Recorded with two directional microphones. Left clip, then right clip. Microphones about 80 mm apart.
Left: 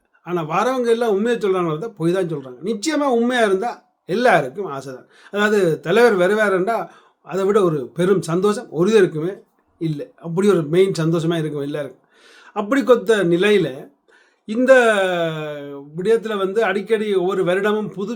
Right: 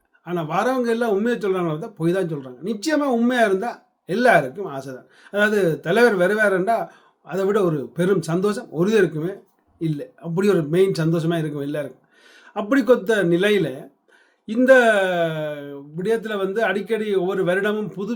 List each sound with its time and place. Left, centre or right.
0.3 s a man's voice: left